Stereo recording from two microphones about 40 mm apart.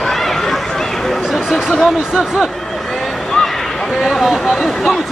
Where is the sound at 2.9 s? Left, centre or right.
Centre.